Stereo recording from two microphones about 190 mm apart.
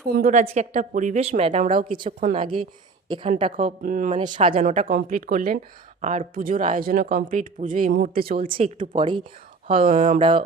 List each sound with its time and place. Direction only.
0.1 s a woman's voice: 45° right (ahead or behind); by 3.8 s 30° right (ahead or behind)
3.8 s speech: 45° right (ahead or behind)
4.2 s speech: 25° right (ahead or behind)
4.7 s speech: 45° right (ahead or behind)
8.4 s speech: 30° right (ahead or behind)
9.8 s speech: 45° right (ahead or behind)
10.2 s speech: 25° right (ahead or behind)